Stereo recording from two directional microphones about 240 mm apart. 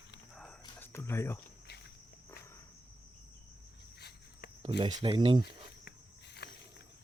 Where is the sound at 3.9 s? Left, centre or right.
Left.